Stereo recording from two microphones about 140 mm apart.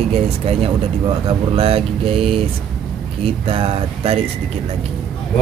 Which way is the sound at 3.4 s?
40° right (ahead or behind).